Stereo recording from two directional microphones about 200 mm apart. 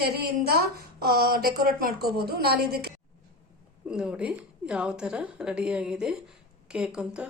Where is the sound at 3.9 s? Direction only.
5° right (ahead or behind).